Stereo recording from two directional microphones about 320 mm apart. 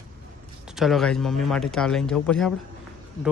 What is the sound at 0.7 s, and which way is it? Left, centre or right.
Speech, centre.